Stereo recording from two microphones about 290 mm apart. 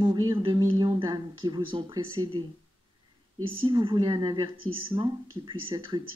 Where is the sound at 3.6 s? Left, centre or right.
Centre.